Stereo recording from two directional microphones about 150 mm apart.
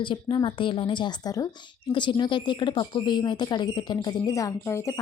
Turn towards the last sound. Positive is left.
turn(degrees=20)  # may be behind; listen again after turning